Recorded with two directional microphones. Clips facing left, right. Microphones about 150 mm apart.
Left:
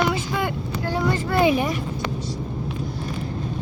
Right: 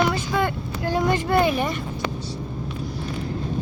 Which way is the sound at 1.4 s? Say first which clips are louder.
Left 3 dB; 15° left (ahead or behind).